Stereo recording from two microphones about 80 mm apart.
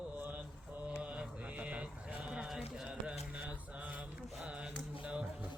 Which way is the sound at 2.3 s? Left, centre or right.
Centre.